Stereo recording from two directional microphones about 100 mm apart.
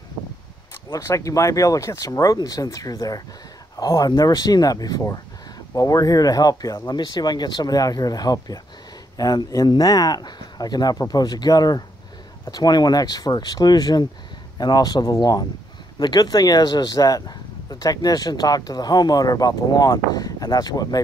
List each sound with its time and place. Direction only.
0.8 s speech: 30° left (ahead or behind)